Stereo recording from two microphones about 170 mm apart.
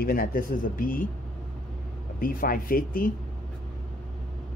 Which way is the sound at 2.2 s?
55° left (ahead or behind).